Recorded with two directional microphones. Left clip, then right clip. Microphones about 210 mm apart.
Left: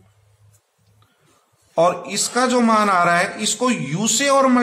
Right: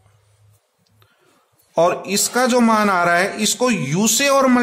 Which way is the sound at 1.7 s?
40° right (ahead or behind).